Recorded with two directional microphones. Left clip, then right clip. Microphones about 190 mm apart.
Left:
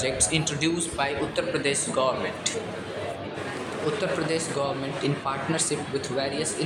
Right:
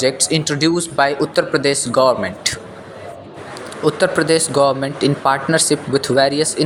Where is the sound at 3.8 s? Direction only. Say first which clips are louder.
Right 12 dB; 45° right (ahead or behind).